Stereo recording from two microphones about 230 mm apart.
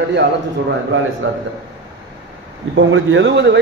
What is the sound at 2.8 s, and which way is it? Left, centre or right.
Speech, right.